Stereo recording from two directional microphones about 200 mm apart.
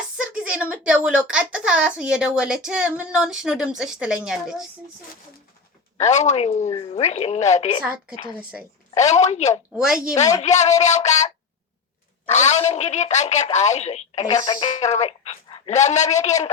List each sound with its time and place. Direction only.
0.2 s speech: 5° right (ahead or behind)
6.0 s speech: 35° left (ahead or behind)
8.4 s a woman's voice: 5° right (ahead or behind)
9.0 s speech: 35° left (ahead or behind)
9.7 s speech: 5° right (ahead or behind)
10.4 s speech: 35° left (ahead or behind)
12.3 s speech: 35° left (ahead or behind)
14.3 s speech: 20° left (ahead or behind)
14.8 s speech: 35° left (ahead or behind)